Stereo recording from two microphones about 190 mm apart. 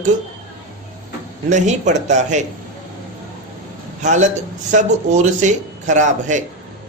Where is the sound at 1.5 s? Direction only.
40° right (ahead or behind).